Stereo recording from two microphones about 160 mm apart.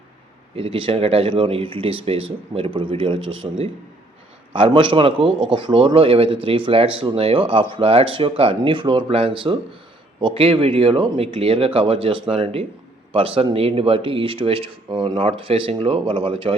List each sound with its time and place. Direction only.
0.5 s a man's voice: 35° right (ahead or behind)